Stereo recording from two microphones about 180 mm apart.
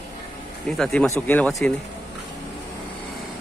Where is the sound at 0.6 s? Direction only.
Centre (ahead or behind).